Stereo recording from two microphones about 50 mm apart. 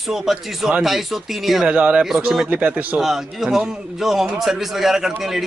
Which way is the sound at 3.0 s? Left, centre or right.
Centre.